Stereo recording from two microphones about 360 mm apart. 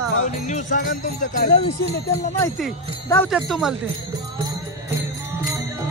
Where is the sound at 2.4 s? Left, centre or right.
Centre.